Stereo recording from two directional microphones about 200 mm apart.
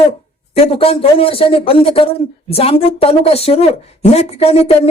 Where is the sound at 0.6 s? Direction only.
30° left (ahead or behind).